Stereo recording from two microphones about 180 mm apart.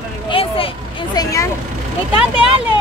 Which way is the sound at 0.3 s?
30° left (ahead or behind).